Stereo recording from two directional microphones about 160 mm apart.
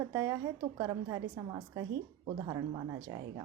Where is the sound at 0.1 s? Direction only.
20° right (ahead or behind).